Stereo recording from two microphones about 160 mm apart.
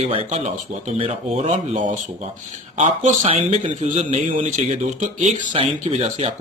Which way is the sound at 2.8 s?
40° right (ahead or behind).